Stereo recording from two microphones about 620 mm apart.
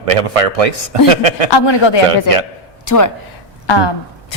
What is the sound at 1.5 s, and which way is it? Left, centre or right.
Speech, left.